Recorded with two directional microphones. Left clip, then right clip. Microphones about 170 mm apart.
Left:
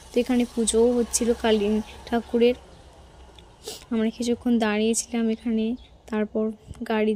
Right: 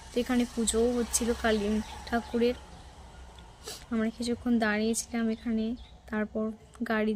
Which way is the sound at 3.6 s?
20° left (ahead or behind).